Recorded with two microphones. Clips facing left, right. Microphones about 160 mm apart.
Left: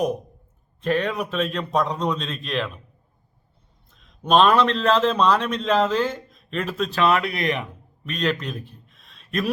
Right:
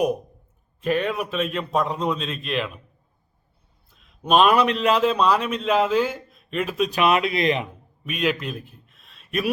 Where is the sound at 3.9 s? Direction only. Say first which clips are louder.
Left 1 dB; 5° right (ahead or behind); by 7.6 s 20° right (ahead or behind).